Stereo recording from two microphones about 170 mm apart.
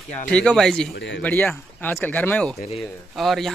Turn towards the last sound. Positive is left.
turn(degrees=0)  # may be behind; listen again after turning